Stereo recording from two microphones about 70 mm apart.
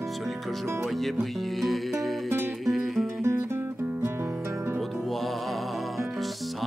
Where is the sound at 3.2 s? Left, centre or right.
Right.